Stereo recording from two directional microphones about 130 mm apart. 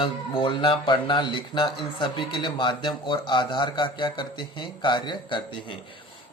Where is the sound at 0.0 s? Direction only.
40° left (ahead or behind).